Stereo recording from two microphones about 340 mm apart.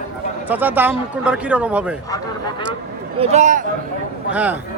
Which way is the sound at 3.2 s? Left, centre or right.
Centre.